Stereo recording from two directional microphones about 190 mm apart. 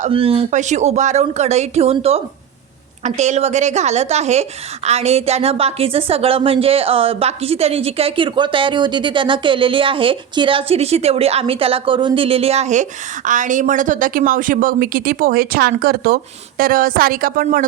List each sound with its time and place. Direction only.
0.0 s a woman's voice: 30° right (ahead or behind); by 17.7 s 50° right (ahead or behind)